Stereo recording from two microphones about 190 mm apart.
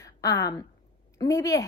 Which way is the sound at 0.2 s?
20° left (ahead or behind).